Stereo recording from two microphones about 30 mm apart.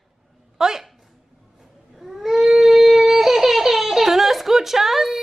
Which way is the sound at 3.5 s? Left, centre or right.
Centre.